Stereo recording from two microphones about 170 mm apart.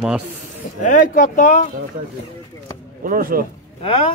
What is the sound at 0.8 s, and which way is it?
Speech, 50° left (ahead or behind).